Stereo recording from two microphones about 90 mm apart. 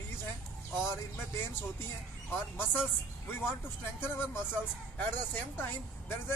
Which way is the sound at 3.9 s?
25° left (ahead or behind).